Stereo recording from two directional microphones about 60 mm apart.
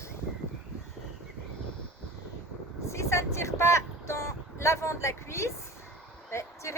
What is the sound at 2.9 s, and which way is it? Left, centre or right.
Vehicle, left.